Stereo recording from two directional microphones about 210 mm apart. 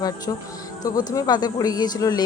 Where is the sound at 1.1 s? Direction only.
20° left (ahead or behind).